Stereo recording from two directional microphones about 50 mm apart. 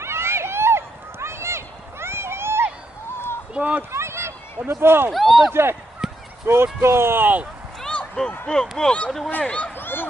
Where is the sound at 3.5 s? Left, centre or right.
Right.